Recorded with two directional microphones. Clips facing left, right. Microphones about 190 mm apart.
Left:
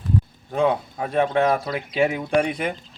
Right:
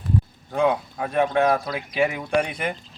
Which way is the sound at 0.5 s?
20° left (ahead or behind).